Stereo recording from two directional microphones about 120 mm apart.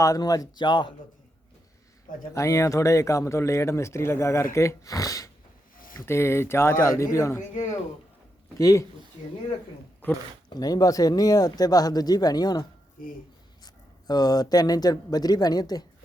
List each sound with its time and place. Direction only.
0.0 s speech: 30° left (ahead or behind)
2.3 s speech: 25° left (ahead or behind)
8.5 s speech: 25° left (ahead or behind)
10.5 s speech: 30° left (ahead or behind)
14.1 s speech: 35° left (ahead or behind)